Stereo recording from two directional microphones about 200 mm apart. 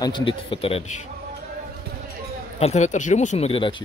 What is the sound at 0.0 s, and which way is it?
A man's voice, 25° left (ahead or behind).